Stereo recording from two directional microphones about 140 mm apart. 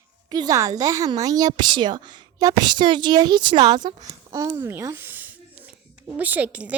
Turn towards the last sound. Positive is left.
turn(degrees=-10)  # may be behind; listen again after turning